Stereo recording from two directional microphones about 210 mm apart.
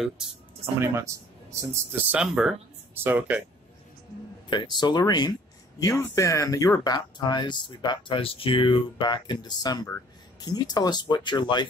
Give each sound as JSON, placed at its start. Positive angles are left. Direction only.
{"t": 0.7, "sound": "speech", "side_deg": -15}
{"t": 4.5, "sound": "speech", "side_deg": 20}